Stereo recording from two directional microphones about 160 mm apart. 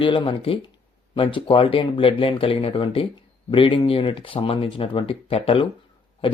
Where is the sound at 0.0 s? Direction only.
30° left (ahead or behind).